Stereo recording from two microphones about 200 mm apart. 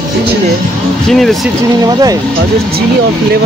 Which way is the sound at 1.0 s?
Centre (ahead or behind).